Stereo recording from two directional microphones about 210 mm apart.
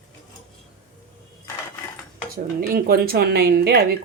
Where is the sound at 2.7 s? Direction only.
45° right (ahead or behind).